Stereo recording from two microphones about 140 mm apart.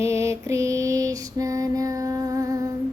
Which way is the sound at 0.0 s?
20° right (ahead or behind).